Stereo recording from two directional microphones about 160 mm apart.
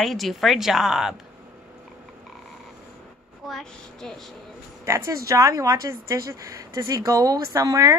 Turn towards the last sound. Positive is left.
turn(degrees=-20)  # may be behind; listen again after turning